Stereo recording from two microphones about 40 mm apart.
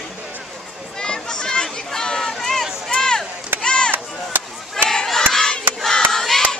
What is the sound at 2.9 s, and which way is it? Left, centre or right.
Chop, centre.